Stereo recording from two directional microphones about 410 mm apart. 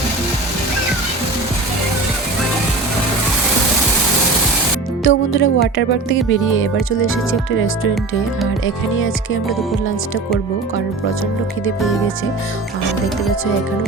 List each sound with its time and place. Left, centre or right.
5.0 s speech: left